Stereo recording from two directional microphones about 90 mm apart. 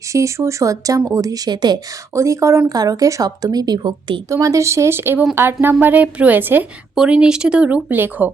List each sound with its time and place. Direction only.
0.1 s a woman's voice: 35° right (ahead or behind); by 1.8 s 50° right (ahead or behind)
2.1 s a woman's voice: 35° right (ahead or behind); by 4.2 s 60° right (ahead or behind)
4.3 s a woman's voice: 35° right (ahead or behind); by 6.7 s 20° right (ahead or behind)
6.9 s speech: 10° right (ahead or behind)